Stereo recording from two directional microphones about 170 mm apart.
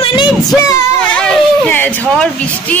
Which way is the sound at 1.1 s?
5° left (ahead or behind).